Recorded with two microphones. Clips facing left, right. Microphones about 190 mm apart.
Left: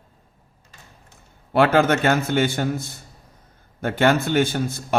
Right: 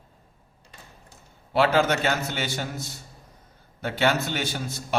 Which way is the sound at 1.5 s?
55° left (ahead or behind).